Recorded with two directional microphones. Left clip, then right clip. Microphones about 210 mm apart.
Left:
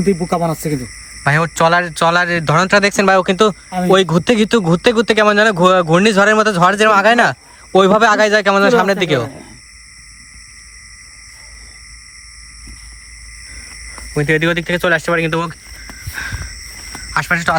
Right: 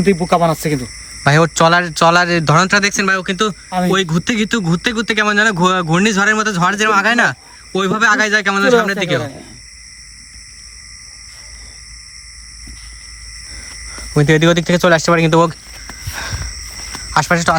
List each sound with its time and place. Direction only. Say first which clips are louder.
0.3 s speech: right 4 dB; 20° right (ahead or behind)
0.8 s speech: right 2 dB; 10° right (ahead or behind); by 3.6 s 15° left (ahead or behind)
3.7 s speech: left 2 dB; 5° right (ahead or behind)
3.9 s speech: left 8 dB; 10° left (ahead or behind)
14.2 s speech: right 2 dB; 25° right (ahead or behind)
16.1 s a sound: left 1 dB; 15° right (ahead or behind)
17.1 s speech: right 2 dB; 15° right (ahead or behind)